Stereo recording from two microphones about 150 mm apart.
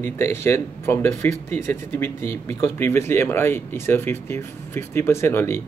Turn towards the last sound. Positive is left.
turn(degrees=15)  # may be behind; listen again after turning